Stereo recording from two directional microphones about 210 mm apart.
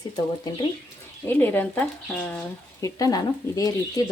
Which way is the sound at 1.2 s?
10° left (ahead or behind).